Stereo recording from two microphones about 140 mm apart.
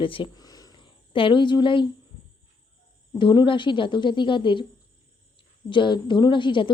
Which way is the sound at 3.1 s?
35° left (ahead or behind).